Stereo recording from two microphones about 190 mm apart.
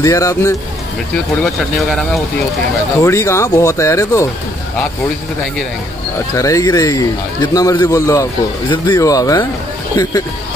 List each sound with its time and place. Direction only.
0.0 s speech: 15° left (ahead or behind)
1.4 s speech: centre (ahead or behind)
3.0 s speech: 15° left (ahead or behind)
6.3 s a man's voice: 15° left (ahead or behind)